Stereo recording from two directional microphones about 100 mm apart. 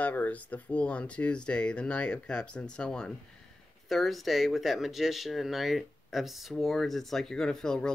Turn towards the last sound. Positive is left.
turn(degrees=5)  # may be behind; listen again after turning